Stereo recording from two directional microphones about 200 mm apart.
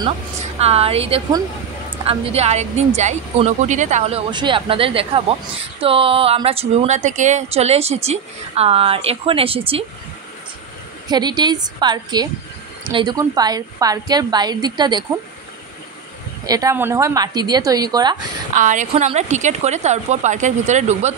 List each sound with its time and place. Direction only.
0.6 s a woman's voice: 30° right (ahead or behind)
11.1 s speech: 20° right (ahead or behind)
16.4 s speech: 20° right (ahead or behind)
18.6 s a woman's voice: 40° right (ahead or behind)